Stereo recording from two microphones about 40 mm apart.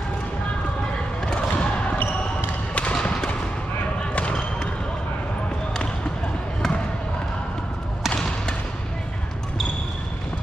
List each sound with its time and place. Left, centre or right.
1.2 s music: left
2.9 s basketball bounce: left